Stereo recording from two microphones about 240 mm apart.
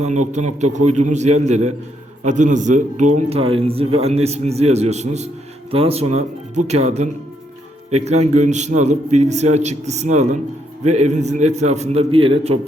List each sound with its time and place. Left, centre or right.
0.0 s a man's voice: right